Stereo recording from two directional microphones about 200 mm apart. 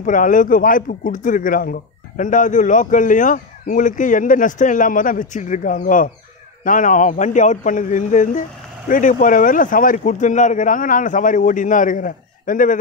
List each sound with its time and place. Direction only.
0.0 s speech: 40° left (ahead or behind)